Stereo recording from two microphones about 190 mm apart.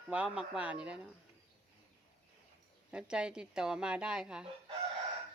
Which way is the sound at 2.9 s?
5° right (ahead or behind).